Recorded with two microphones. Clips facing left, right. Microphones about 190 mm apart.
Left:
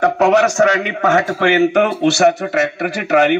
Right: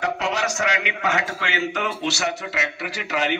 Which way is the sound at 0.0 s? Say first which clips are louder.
Left 12 dB; 55° left (ahead or behind).